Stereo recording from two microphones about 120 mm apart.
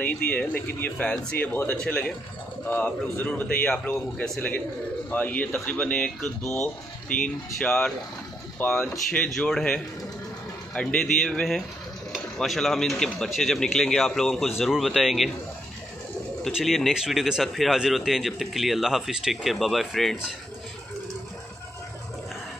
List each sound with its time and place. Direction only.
0.0 s speech: 10° left (ahead or behind)
8.9 s a man's voice: 5° left (ahead or behind)
16.4 s a man's voice: centre (ahead or behind)